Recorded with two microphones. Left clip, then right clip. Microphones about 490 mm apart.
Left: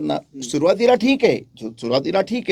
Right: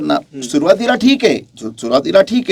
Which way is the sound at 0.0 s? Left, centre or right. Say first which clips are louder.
Right 7 dB; left.